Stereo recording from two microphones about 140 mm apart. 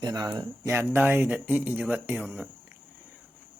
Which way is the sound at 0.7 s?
15° right (ahead or behind).